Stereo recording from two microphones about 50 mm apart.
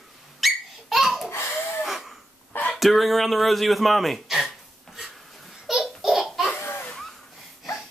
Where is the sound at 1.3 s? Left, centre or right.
Left.